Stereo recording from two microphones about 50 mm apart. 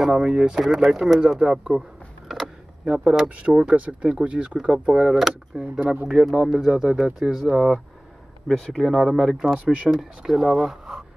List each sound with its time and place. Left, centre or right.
0.0 s speech: centre
2.8 s speech: centre
5.0 s speech: centre
8.6 s speech: centre